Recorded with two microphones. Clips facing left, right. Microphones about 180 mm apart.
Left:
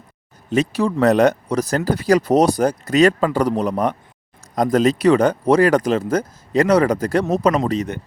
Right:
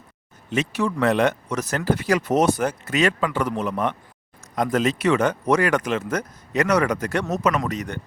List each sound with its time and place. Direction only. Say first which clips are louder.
0.5 s speech: left 5 dB; 35° left (ahead or behind)